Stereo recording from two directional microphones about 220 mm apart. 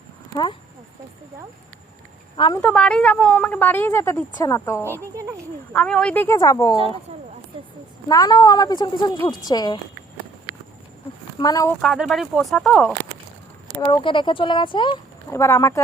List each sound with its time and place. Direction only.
2.3 s a woman's voice: 20° left (ahead or behind)
2.6 s speech: 5° left (ahead or behind)
5.1 s speech: 15° right (ahead or behind)
5.7 s speech: 5° left (ahead or behind)
8.0 s speech: 15° left (ahead or behind)
11.3 s speech: 15° left (ahead or behind)
11.8 s speech: centre (ahead or behind)
13.8 s speech: 20° left (ahead or behind)
15.3 s speech: 10° left (ahead or behind)